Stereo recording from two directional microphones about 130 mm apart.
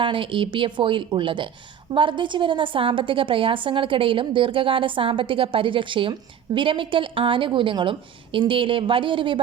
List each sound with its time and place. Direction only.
0.0 s a woman's voice: 40° right (ahead or behind)